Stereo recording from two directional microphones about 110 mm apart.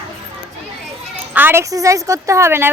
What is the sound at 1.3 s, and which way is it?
Speech, 20° right (ahead or behind).